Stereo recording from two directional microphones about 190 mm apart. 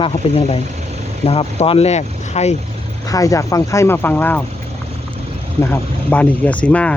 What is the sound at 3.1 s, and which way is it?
Speech, 15° left (ahead or behind).